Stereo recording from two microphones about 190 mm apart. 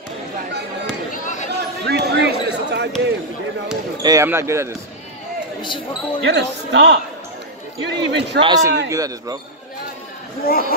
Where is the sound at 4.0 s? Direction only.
15° right (ahead or behind).